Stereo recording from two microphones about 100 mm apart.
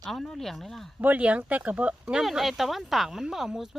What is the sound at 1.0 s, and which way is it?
Speech, 15° right (ahead or behind).